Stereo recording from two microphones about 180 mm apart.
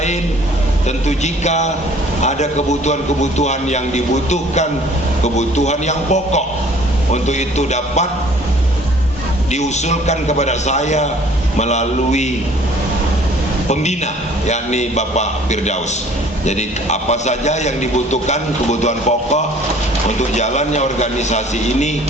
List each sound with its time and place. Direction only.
0.9 s a man's voice: 40° left (ahead or behind)
9.5 s a man's voice: 40° left (ahead or behind)
13.7 s a man's voice: 40° left (ahead or behind)